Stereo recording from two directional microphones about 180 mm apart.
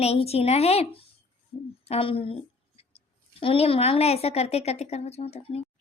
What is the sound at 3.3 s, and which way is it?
A woman's voice, 30° left (ahead or behind).